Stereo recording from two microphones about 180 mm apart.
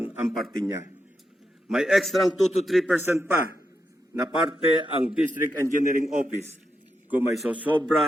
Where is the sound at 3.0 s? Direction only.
10° right (ahead or behind).